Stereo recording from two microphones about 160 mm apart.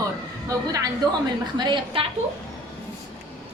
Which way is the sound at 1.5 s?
30° right (ahead or behind).